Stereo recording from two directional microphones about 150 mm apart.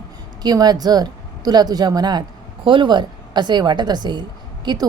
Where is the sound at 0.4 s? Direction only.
25° right (ahead or behind).